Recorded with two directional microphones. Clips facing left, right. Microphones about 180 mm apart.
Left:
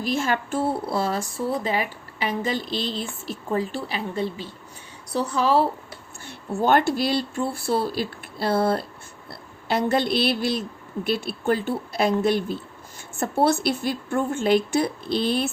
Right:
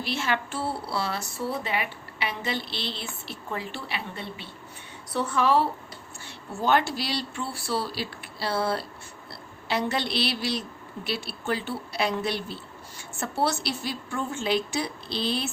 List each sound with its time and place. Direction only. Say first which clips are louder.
0.0 s a woman's voice: left 4 dB; 45° left (ahead or behind)
6.2 s speech: left 5 dB; 50° left (ahead or behind)